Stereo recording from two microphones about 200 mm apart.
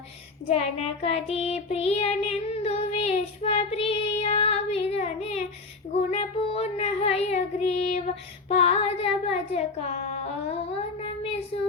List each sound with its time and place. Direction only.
0.4 s child singing: 30° left (ahead or behind)
11.5 s child singing: 35° left (ahead or behind)